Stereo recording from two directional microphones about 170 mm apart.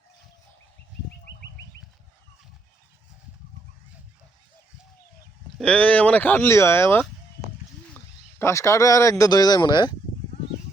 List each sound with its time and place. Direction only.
5.5 s speech: 5° left (ahead or behind)
8.4 s speech: 15° left (ahead or behind)